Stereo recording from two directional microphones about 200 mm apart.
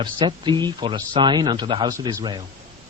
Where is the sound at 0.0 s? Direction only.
25° right (ahead or behind).